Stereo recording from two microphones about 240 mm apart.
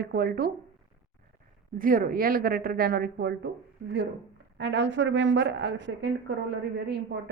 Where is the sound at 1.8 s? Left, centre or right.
Right.